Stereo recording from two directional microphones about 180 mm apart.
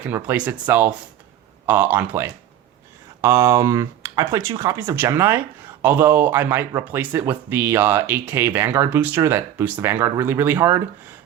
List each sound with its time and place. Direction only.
0.1 s speech: 10° right (ahead or behind)